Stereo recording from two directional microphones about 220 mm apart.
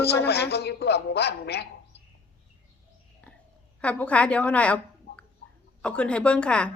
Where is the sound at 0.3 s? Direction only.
45° left (ahead or behind).